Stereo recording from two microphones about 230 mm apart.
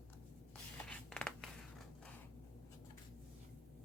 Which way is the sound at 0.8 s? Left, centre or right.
Centre.